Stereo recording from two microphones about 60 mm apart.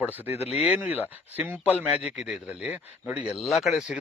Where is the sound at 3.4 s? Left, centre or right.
Centre.